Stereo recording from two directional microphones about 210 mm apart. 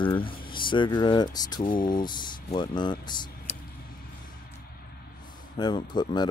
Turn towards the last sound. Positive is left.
turn(degrees=20)  # may be behind; listen again after turning